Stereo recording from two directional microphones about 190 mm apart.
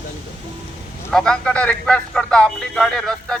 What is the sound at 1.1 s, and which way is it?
Speech, 5° left (ahead or behind).